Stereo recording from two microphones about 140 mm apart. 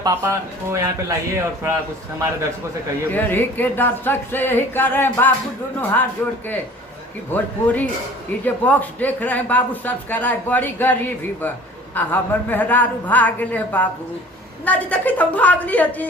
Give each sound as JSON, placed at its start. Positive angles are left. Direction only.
{"t": 0.0, "sound": "speech", "side_deg": -20}
{"t": 3.1, "sound": "speech", "side_deg": 15}
{"t": 7.3, "sound": "speech", "side_deg": 10}